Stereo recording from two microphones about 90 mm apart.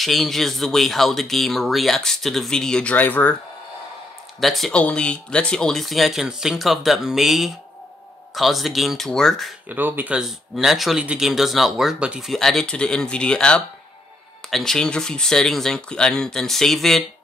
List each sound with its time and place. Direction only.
0.0 s speech: centre (ahead or behind); by 3.3 s 20° left (ahead or behind)
4.4 s speech: centre (ahead or behind)
4.7 s speech: 15° left (ahead or behind)
9.7 s speech: 20° right (ahead or behind)
10.1 s speech: 5° right (ahead or behind)
12.3 s speech: 5° left (ahead or behind)